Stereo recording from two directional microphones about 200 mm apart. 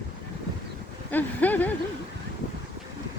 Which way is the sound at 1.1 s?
10° left (ahead or behind).